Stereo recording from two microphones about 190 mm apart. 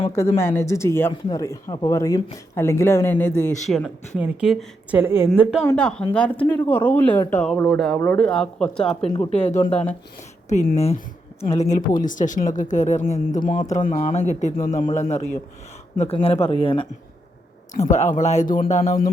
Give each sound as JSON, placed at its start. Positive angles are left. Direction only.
{"t": 0.3, "sound": "speech", "side_deg": 15}
{"t": 3.7, "sound": "a woman's voice", "side_deg": 0}
{"t": 9.0, "sound": "speech", "side_deg": 25}
{"t": 10.5, "sound": "speech", "side_deg": 35}
{"t": 14.8, "sound": "speech", "side_deg": 30}
{"t": 17.7, "sound": "speech", "side_deg": 40}